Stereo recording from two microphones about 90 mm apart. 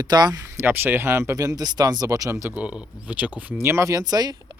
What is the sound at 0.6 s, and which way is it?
Speech, 25° right (ahead or behind).